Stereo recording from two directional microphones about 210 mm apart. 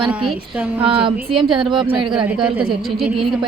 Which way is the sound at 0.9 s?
25° right (ahead or behind).